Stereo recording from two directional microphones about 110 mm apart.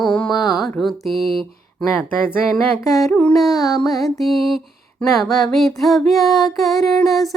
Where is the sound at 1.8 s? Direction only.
Centre (ahead or behind).